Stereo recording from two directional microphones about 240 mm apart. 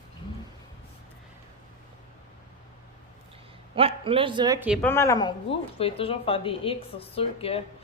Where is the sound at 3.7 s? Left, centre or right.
Right.